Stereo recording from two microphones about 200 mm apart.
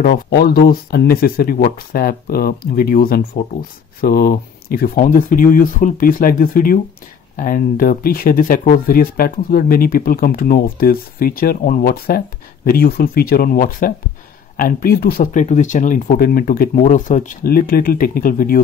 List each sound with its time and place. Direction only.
0.1 s speech: 50° left (ahead or behind)